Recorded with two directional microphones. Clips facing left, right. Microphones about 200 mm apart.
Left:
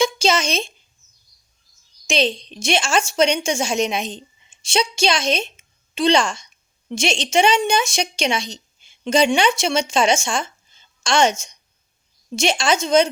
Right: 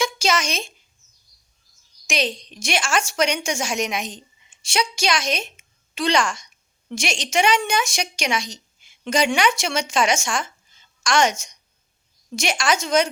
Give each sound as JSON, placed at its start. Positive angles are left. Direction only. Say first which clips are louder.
{"t": 0.0, "sound": "speech", "louder": "left 4 dB", "side_deg": 25}
{"t": 2.0, "sound": "a woman's voice", "louder": "left 5 dB", "side_deg": 25}